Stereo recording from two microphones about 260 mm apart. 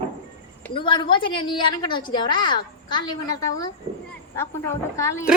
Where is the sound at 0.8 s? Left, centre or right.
Centre.